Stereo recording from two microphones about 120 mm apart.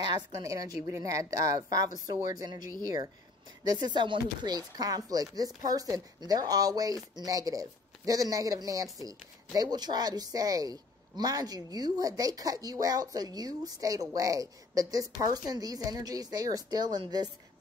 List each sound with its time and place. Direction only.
0.0 s a woman's voice: 30° right (ahead or behind)
3.6 s speech: 40° right (ahead or behind)